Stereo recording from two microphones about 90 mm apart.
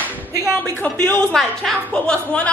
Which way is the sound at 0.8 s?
10° left (ahead or behind).